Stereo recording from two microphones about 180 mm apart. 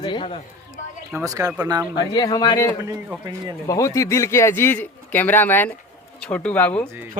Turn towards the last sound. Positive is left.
turn(degrees=10)  # may be behind; listen again after turning